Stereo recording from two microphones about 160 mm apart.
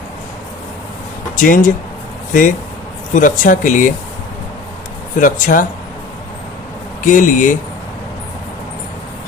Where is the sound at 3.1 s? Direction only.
55° left (ahead or behind).